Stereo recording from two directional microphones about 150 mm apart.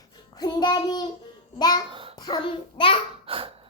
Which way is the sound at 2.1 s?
25° left (ahead or behind).